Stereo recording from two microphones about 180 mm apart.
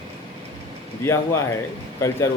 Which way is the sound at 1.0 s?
15° left (ahead or behind).